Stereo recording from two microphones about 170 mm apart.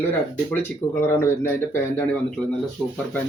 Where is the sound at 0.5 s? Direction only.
10° left (ahead or behind).